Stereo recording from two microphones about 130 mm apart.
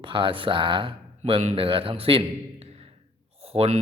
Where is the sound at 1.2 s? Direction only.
55° right (ahead or behind).